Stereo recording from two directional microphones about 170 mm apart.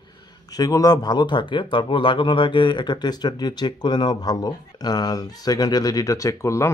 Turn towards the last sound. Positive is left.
turn(degrees=15)  # may be behind; listen again after turning